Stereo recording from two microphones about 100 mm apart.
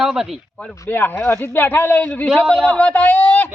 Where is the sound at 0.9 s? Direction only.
20° left (ahead or behind).